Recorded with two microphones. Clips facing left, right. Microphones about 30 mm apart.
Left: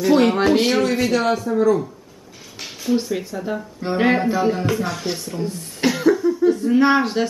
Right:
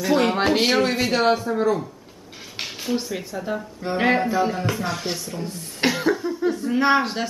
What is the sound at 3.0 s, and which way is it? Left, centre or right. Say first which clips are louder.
Speech: left 4 dB; centre.